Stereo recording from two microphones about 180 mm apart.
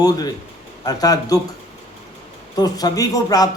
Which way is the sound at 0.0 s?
20° left (ahead or behind).